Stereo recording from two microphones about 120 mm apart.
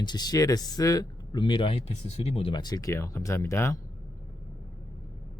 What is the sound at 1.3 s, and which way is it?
Speech, 45° left (ahead or behind).